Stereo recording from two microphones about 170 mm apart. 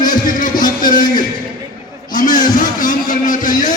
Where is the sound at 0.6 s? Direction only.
55° left (ahead or behind).